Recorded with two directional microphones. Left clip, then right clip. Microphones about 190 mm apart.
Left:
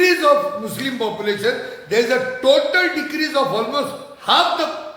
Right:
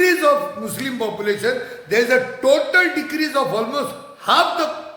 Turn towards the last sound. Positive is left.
turn(degrees=-20)  # may be behind; listen again after turning